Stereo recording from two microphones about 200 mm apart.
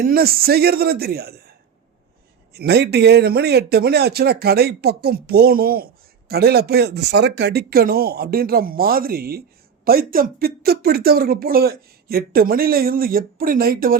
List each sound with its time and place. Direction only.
0.0 s a man's voice: 50° right (ahead or behind)
2.5 s a man's voice: 55° right (ahead or behind)